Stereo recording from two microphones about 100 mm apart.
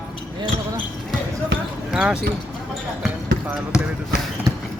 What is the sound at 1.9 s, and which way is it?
Speech, 10° right (ahead or behind).